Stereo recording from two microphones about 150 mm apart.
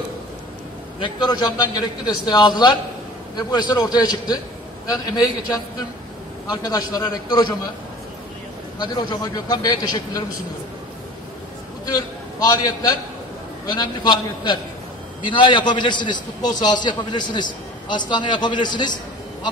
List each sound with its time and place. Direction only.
0.9 s a man's voice: 30° left (ahead or behind)
8.7 s a man's voice: 30° left (ahead or behind)
11.8 s a man's voice: 25° left (ahead or behind)